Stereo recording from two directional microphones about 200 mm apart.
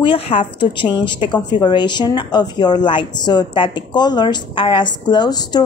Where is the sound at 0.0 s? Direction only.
25° left (ahead or behind).